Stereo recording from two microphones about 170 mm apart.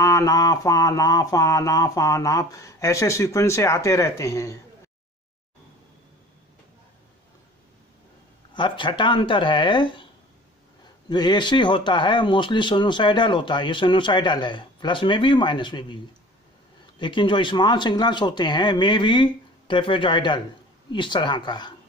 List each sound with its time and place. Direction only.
0.0 s speech: 20° left (ahead or behind)
8.5 s speech: 30° left (ahead or behind)
11.1 s speech: 25° left (ahead or behind)
17.0 s speech: 30° left (ahead or behind)